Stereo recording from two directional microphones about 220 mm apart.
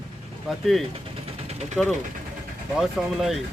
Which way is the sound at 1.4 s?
30° right (ahead or behind).